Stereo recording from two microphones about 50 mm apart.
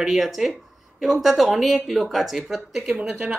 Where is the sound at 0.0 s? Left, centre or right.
Centre.